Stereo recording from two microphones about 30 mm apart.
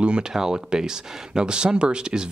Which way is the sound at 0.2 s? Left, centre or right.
Right.